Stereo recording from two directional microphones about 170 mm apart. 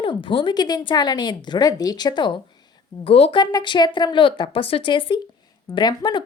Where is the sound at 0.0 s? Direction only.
30° left (ahead or behind).